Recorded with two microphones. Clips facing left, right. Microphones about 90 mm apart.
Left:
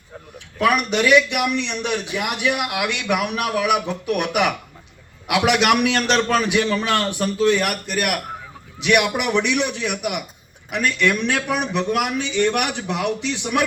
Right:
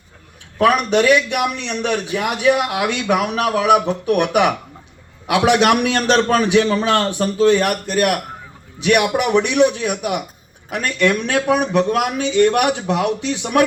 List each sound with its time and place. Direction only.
0.6 s a man's voice: 35° right (ahead or behind)
10.7 s a man's voice: 40° right (ahead or behind)
11.7 s a man's voice: 35° right (ahead or behind)
13.4 s speech: 45° right (ahead or behind)